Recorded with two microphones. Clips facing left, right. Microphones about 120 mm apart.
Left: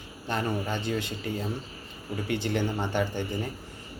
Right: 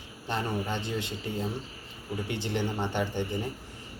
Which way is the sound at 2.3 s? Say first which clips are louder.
Left 4 dB; 20° right (ahead or behind).